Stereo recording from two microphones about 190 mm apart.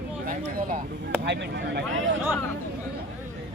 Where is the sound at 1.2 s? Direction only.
65° right (ahead or behind).